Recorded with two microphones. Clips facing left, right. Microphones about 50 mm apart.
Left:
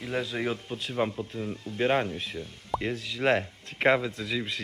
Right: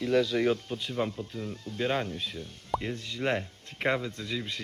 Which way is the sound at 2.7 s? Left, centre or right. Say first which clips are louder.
Left 1 dB; centre.